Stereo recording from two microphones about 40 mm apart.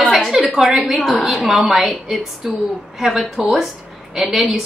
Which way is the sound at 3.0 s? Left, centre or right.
Centre.